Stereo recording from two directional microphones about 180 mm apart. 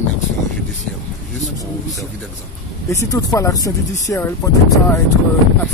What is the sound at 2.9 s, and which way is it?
Speech, 20° left (ahead or behind).